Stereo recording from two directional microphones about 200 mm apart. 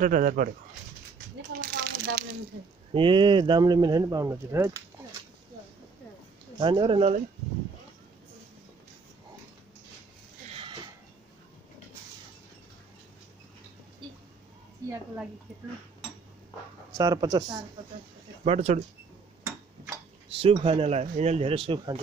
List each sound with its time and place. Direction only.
0.0 s speech: 40° right (ahead or behind)
1.6 s a sound: 45° right (ahead or behind)
2.9 s speech: 25° right (ahead or behind)
6.6 s speech: 25° right (ahead or behind)
10.5 s a sound: 25° right (ahead or behind)
14.8 s a woman's voice: 15° right (ahead or behind)
16.9 s speech: 20° right (ahead or behind)
18.4 s speech: 30° right (ahead or behind)
20.3 s speech: 30° right (ahead or behind)